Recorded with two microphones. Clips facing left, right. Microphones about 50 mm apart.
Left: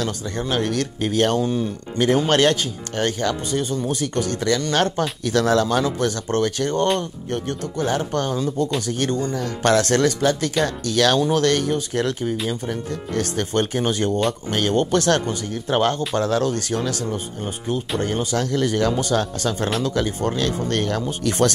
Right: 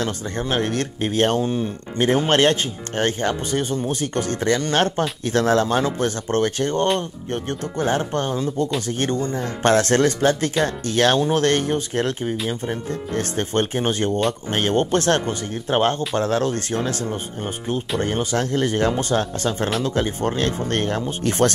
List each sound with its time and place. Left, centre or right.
0.0 s speech: right